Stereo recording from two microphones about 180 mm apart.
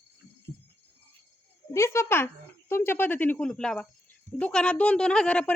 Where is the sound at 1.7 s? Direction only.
15° left (ahead or behind).